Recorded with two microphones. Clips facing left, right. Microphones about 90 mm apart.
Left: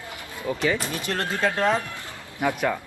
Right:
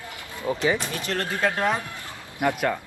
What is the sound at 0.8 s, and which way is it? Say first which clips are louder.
Speech: even; 20° left (ahead or behind).